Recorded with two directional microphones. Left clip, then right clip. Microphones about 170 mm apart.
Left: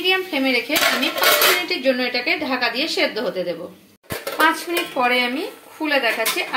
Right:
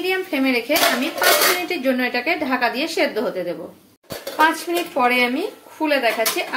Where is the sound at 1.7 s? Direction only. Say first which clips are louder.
Left 1 dB; 15° right (ahead or behind).